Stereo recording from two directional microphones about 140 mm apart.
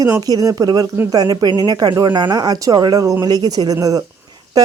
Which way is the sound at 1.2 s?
30° right (ahead or behind).